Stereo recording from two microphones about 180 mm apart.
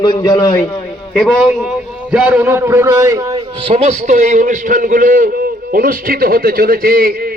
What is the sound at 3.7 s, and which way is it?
A man's voice, 40° right (ahead or behind).